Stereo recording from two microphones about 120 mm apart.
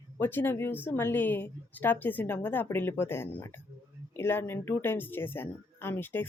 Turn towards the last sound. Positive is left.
turn(degrees=15)  # may be behind; listen again after turning